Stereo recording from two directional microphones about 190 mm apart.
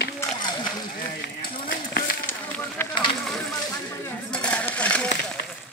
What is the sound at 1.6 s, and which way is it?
Run, 50° left (ahead or behind).